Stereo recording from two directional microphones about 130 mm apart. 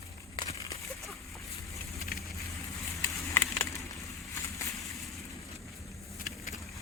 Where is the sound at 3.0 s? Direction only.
20° left (ahead or behind).